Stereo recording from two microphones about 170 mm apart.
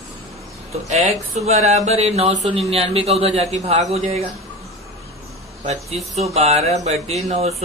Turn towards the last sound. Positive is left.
turn(degrees=-40)  # may be behind; listen again after turning